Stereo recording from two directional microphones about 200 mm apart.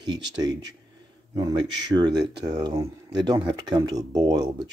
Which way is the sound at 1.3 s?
20° right (ahead or behind).